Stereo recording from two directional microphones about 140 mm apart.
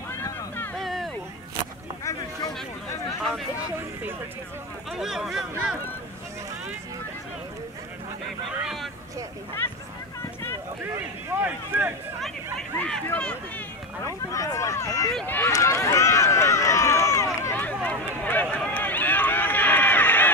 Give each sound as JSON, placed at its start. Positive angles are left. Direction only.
{"t": 0.1, "sound": "a sound", "side_deg": 20}
{"t": 0.7, "sound": "a sound", "side_deg": 0}
{"t": 4.9, "sound": "speech", "side_deg": -5}
{"t": 8.5, "sound": "speech", "side_deg": 0}
{"t": 9.6, "sound": "speech", "side_deg": 15}
{"t": 10.8, "sound": "speech", "side_deg": -15}
{"t": 12.5, "sound": "speech", "side_deg": 5}
{"t": 14.0, "sound": "speech", "side_deg": 20}
{"t": 15.2, "sound": "run", "side_deg": 15}